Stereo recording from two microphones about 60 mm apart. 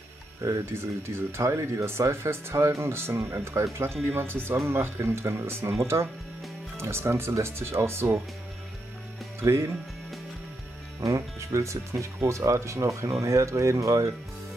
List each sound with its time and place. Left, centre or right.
0.4 s speech: right
0.7 s speech: right
6.8 s speech: right
9.4 s speech: right
11.0 s speech: right